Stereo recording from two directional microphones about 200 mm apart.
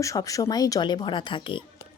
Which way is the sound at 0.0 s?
15° left (ahead or behind).